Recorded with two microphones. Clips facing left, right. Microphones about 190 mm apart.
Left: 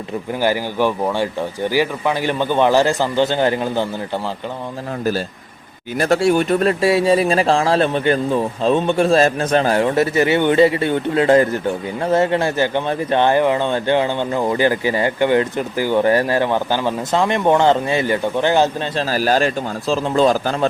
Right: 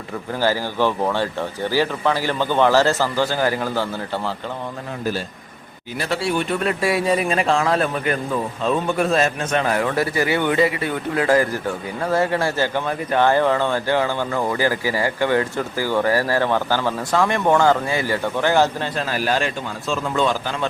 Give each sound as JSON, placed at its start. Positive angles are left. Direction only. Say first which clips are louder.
{"t": 0.4, "sound": "speech", "louder": "left 2 dB", "side_deg": 15}
{"t": 6.0, "sound": "speech", "louder": "left 7 dB", "side_deg": 45}
{"t": 6.8, "sound": "speech", "louder": "left 4 dB", "side_deg": 25}
{"t": 19.1, "sound": "a man's voice", "louder": "left 6 dB", "side_deg": 40}